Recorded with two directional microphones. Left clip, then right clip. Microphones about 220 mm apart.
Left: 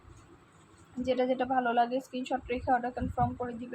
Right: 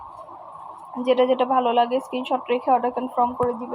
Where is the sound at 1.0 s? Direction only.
20° right (ahead or behind).